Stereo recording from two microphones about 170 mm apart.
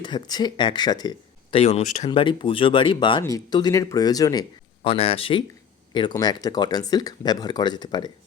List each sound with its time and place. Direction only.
0.0 s speech: 25° left (ahead or behind); by 2.0 s 40° left (ahead or behind)
2.0 s speech: 30° left (ahead or behind)